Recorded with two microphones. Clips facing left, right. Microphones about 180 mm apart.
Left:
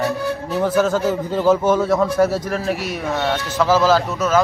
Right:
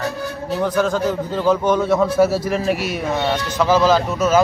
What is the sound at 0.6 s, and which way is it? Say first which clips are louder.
A man's voice: left 1 dB; 5° left (ahead or behind).